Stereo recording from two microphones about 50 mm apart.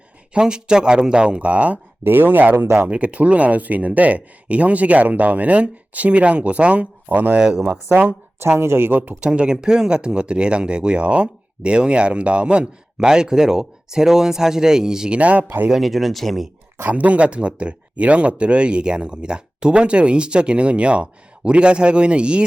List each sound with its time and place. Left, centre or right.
0.3 s speech: centre
2.0 s speech: right
2.9 s speech: right
8.4 s speech: right
9.2 s speech: right
15.2 s speech: right
15.4 s speech: right
15.7 s speech: centre
16.9 s speech: right